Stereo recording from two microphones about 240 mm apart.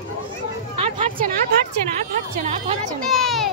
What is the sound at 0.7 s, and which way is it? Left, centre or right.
Speech, right.